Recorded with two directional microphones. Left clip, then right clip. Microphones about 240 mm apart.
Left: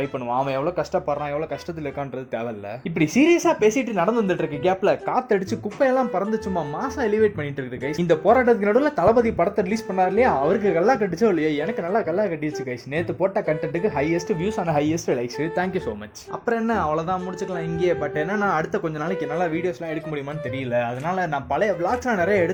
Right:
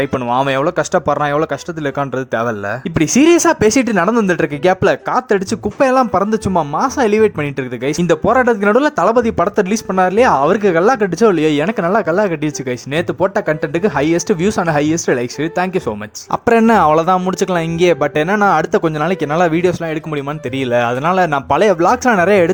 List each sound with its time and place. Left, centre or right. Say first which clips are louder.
0.0 s speech: right 9 dB; right
16.3 s speech: right 12 dB; right